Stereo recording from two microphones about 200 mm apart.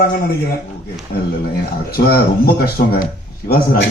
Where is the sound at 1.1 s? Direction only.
50° left (ahead or behind).